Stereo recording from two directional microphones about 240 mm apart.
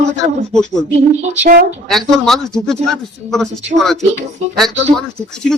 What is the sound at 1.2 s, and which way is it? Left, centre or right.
Speech, right.